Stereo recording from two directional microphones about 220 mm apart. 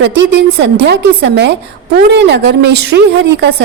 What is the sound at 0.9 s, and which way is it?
A woman's voice, 50° right (ahead or behind).